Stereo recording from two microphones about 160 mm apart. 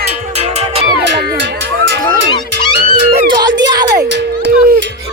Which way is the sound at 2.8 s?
70° right (ahead or behind).